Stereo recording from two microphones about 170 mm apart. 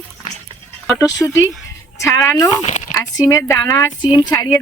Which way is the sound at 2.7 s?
45° left (ahead or behind).